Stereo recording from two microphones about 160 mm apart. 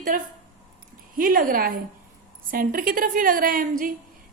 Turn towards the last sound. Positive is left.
turn(degrees=-60)  # may be behind; listen again after turning